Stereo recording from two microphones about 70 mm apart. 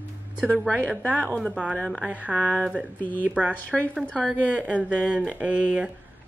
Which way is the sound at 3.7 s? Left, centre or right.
Centre.